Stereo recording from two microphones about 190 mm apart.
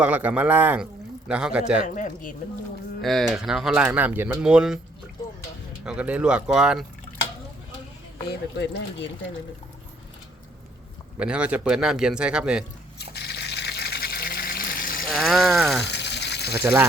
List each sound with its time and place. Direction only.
0.0 s a man's voice: 5° right (ahead or behind)
2.0 s speech: 45° left (ahead or behind)
3.0 s speech: centre (ahead or behind)
5.8 s speech: 5° right (ahead or behind)
8.3 s speech: 65° left (ahead or behind)
11.2 s speech: 5° right (ahead or behind)
13.0 s a sound: 60° left (ahead or behind)
15.1 s speech: centre (ahead or behind)
15.8 s a sound: 65° left (ahead or behind)